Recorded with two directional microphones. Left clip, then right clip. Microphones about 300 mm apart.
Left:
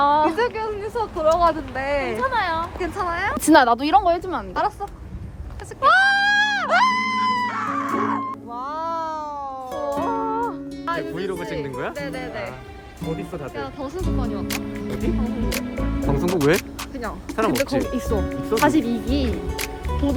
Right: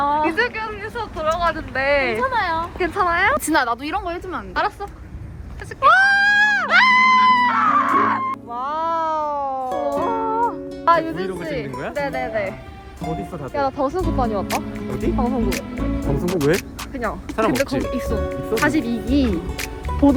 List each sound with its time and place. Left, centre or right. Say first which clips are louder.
0.0 s speech: left 1 dB; centre
3.4 s a woman's voice: left 5 dB; left
4.5 s speech: right 2 dB; centre
5.8 s a sound: right 2 dB; right
6.7 s music: right 5 dB; centre
10.8 s speech: right 9 dB; centre
13.6 s speech: right 12 dB; centre
15.4 s music: right 2 dB; centre
16.2 s speech: even; centre